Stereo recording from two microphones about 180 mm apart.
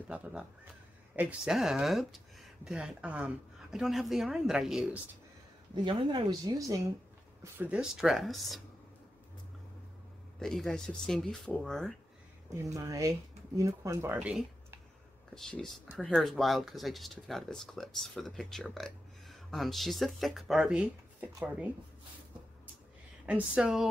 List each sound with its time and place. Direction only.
0.1 s speech: 5° right (ahead or behind)
5.9 s a woman's voice: 25° right (ahead or behind)
7.4 s speech: 10° right (ahead or behind)
10.4 s speech: centre (ahead or behind)
12.7 s speech: 20° right (ahead or behind)
15.3 s speech: 5° left (ahead or behind)
23.2 s speech: 5° right (ahead or behind)